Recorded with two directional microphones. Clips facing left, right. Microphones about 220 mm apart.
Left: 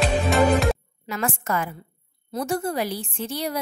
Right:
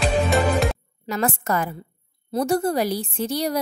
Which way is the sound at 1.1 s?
40° right (ahead or behind).